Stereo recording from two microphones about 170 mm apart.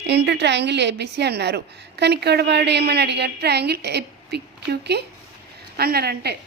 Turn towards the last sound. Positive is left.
turn(degrees=-70)  # may be behind; listen again after turning